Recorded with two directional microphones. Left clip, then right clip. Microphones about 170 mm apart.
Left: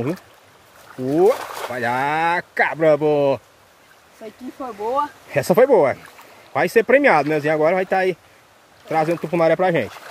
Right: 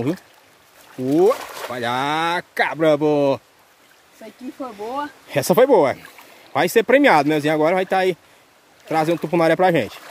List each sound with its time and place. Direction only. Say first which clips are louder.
1.0 s speech: even; 35° right (ahead or behind)
1.7 s speech: left 1 dB; 25° right (ahead or behind)
4.6 s speech: left 5 dB; 25° right (ahead or behind)